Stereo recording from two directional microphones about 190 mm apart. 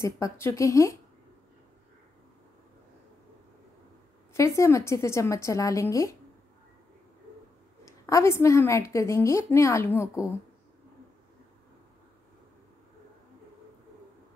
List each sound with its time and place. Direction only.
0.0 s a woman's voice: 15° left (ahead or behind)
4.3 s a woman's voice: 15° left (ahead or behind)
7.8 s a woman's voice: 15° left (ahead or behind)